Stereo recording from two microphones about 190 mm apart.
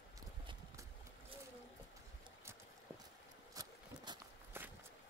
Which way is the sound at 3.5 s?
20° right (ahead or behind).